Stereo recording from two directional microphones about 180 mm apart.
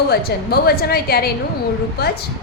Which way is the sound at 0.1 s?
60° left (ahead or behind).